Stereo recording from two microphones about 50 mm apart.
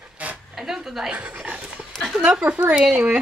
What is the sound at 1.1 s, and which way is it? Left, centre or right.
Speech, right.